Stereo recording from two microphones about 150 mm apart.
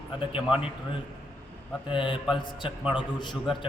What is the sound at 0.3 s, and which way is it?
Speech, 5° right (ahead or behind).